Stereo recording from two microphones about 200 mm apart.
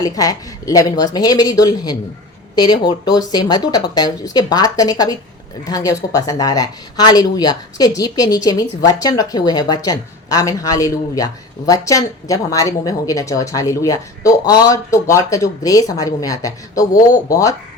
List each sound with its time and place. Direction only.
0.0 s speech: 15° left (ahead or behind)